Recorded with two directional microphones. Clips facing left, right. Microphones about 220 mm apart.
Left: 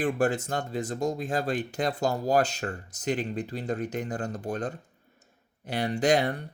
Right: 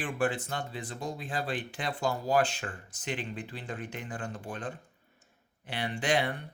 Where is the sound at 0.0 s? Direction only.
40° left (ahead or behind).